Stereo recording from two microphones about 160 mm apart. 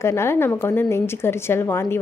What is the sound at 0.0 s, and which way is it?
A woman's voice, 15° left (ahead or behind).